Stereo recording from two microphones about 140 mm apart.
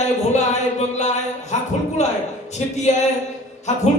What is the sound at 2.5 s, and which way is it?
Speech, 55° left (ahead or behind).